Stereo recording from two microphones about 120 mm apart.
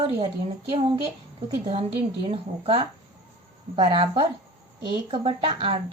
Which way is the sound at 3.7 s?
45° right (ahead or behind).